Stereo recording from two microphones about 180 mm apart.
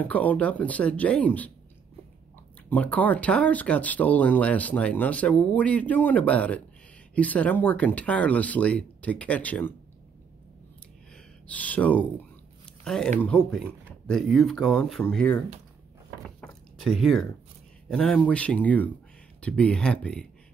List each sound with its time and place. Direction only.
0.0 s speech: 10° left (ahead or behind)
2.7 s speech: 10° left (ahead or behind)
11.4 s speech: 10° left (ahead or behind)
16.3 s a sound: 5° left (ahead or behind)
17.8 s speech: 5° left (ahead or behind)